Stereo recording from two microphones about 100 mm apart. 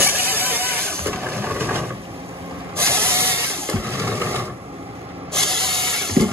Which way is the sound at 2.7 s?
25° right (ahead or behind).